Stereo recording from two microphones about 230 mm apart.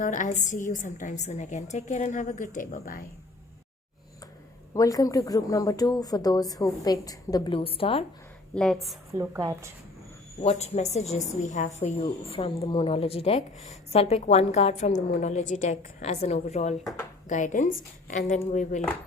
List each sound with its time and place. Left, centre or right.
0.0 s a woman's voice: left
4.7 s speech: centre
8.5 s a woman's voice: centre
9.1 s a woman's voice: centre
10.4 s a woman's voice: left